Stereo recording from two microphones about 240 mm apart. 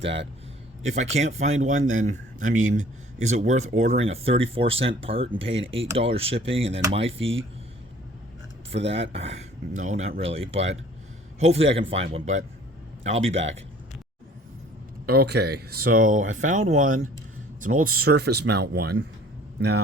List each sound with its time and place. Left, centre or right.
0.8 s a man's voice: right
8.7 s a man's voice: right
15.0 s a man's voice: right